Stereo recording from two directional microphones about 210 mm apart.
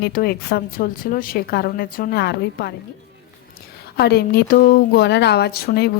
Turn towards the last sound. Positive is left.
turn(degrees=50)  # may be behind; listen again after turning